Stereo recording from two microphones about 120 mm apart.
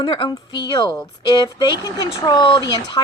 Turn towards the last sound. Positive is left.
turn(degrees=35)  # may be behind; listen again after turning